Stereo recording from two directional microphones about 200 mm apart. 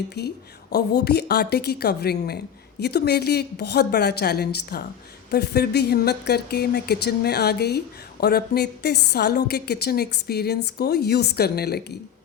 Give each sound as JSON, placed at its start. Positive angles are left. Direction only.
{"t": 0.2, "sound": "a woman's voice", "side_deg": 55}